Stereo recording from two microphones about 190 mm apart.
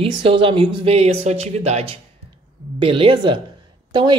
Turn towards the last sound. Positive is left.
turn(degrees=-25)  # may be behind; listen again after turning